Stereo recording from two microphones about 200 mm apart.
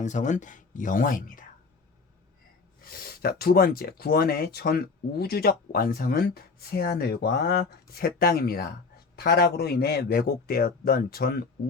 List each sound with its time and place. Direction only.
0.0 s speech: 35° left (ahead or behind)
2.8 s speech: 50° left (ahead or behind)